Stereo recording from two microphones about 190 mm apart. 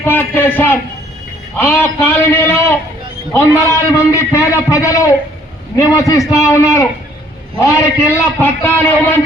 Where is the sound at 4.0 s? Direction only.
15° left (ahead or behind).